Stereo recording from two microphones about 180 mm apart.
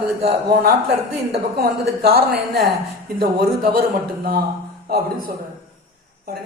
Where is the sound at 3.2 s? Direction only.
55° right (ahead or behind).